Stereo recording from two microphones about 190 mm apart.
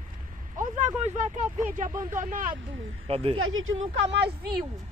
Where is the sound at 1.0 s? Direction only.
35° right (ahead or behind).